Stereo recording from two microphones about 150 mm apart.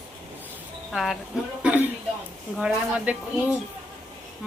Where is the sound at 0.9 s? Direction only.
Centre (ahead or behind).